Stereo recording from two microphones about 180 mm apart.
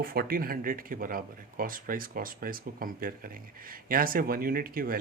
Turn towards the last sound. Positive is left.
turn(degrees=-55)  # may be behind; listen again after turning